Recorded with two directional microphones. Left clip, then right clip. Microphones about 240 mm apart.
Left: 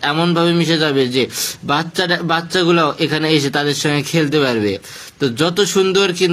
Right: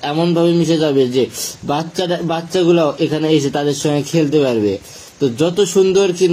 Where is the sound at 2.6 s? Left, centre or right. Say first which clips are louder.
Right 4 dB; centre.